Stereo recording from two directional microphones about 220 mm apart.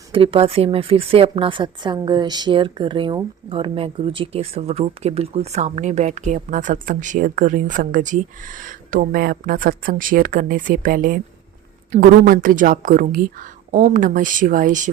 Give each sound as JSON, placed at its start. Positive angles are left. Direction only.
{"t": 0.1, "sound": "a woman's voice", "side_deg": -25}